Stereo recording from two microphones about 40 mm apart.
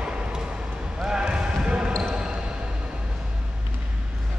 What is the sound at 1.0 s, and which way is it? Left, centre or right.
Basketball bounce, centre.